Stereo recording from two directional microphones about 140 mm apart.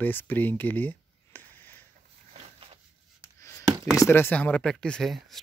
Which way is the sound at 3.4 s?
20° left (ahead or behind).